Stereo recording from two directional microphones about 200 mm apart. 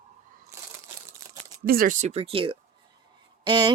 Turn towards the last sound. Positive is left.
turn(degrees=-25)  # may be behind; listen again after turning